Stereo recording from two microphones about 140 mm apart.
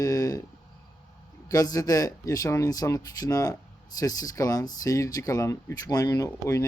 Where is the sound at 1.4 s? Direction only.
25° left (ahead or behind).